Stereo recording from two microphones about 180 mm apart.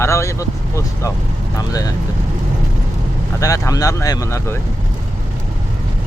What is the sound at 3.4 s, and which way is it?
Speech, 20° left (ahead or behind).